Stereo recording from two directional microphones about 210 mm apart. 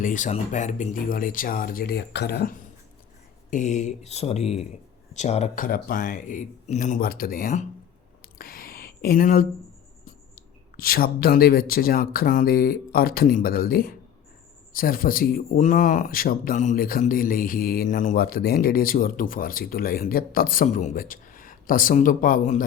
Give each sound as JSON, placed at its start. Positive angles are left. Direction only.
{"t": 0.0, "sound": "speech", "side_deg": 35}
{"t": 3.5, "sound": "speech", "side_deg": 35}
{"t": 8.2, "sound": "a sound", "side_deg": 45}
{"t": 10.3, "sound": "speech", "side_deg": 45}